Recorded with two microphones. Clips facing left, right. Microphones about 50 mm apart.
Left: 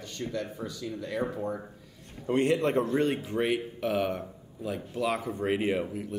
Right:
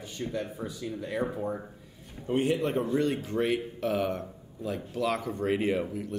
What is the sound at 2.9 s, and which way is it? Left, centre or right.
Speech, left.